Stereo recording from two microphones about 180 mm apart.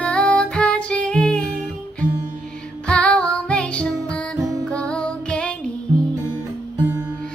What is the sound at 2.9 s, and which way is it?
Music, 5° left (ahead or behind).